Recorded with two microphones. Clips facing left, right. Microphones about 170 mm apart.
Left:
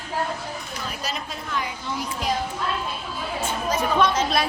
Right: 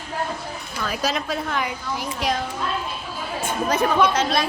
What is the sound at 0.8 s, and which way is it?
Speech, 90° right.